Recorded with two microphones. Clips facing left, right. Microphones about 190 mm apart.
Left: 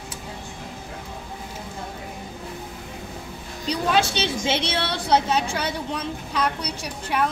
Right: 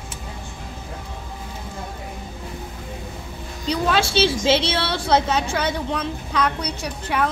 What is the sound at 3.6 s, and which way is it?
A woman's voice, 15° left (ahead or behind).